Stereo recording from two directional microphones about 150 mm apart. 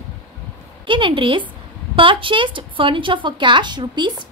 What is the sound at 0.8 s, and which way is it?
A woman's voice, 35° right (ahead or behind).